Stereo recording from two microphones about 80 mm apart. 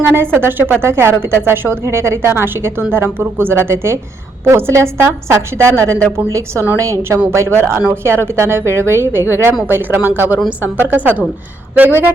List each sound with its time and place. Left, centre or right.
0.0 s a woman's voice: right